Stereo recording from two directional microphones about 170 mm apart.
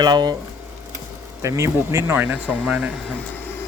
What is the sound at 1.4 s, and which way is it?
Speech, 15° right (ahead or behind).